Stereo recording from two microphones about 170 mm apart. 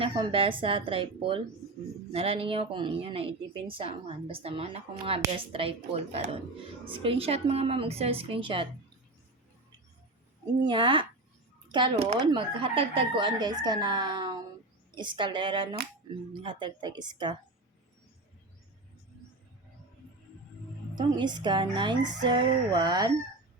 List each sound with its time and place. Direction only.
0.0 s a woman's voice: 30° right (ahead or behind)
10.6 s speech: 30° right (ahead or behind)
20.9 s speech: 25° right (ahead or behind)